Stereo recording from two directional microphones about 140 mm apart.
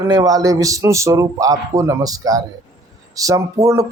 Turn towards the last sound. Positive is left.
turn(degrees=-20)  # may be behind; listen again after turning